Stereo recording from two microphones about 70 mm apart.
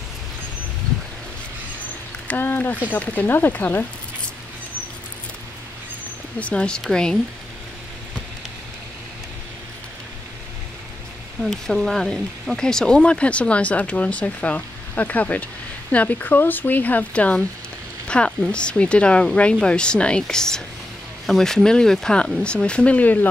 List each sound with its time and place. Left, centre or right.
2.2 s speech: left
6.4 s speech: centre
11.5 s speech: centre; by 23.2 s left